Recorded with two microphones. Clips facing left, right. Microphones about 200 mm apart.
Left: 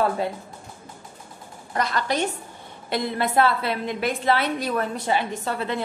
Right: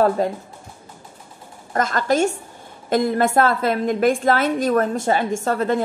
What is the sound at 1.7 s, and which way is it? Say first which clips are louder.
A woman's voice: right 5 dB; 45° right (ahead or behind).